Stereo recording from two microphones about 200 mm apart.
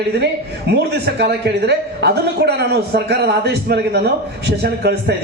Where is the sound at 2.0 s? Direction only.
55° right (ahead or behind).